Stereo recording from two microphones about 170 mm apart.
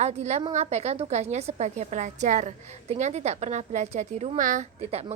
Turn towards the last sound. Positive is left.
turn(degrees=-35)  # may be behind; listen again after turning